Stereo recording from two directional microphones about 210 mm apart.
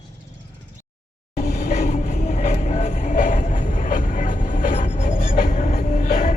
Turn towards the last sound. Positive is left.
turn(degrees=40)  # may be behind; listen again after turning